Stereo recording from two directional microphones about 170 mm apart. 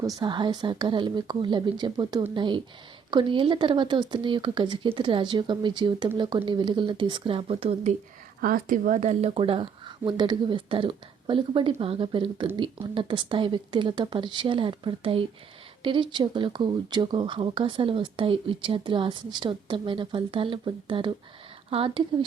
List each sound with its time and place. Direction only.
0.0 s speech: 25° right (ahead or behind)
8.4 s speech: 55° right (ahead or behind); by 22.0 s 30° right (ahead or behind)